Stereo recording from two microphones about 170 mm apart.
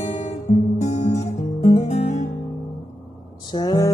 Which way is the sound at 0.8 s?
40° left (ahead or behind).